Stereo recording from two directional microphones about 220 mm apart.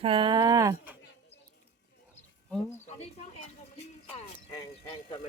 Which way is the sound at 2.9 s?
30° left (ahead or behind).